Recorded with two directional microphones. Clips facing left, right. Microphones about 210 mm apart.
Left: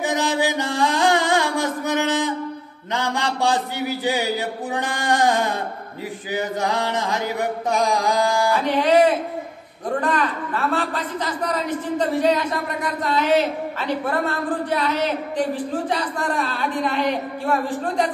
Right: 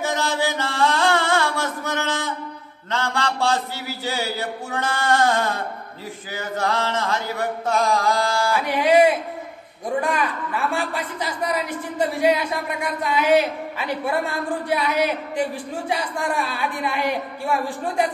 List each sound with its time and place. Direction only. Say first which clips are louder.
0.0 s music: left 2 dB; 15° left (ahead or behind)
2.9 s a sound: left 1 dB; 15° left (ahead or behind)
8.5 s a woman's voice: right 1 dB; 10° right (ahead or behind)